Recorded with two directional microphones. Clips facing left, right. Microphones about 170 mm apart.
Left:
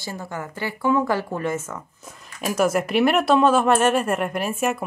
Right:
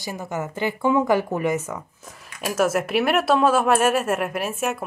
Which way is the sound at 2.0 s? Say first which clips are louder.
Left 1 dB; centre (ahead or behind).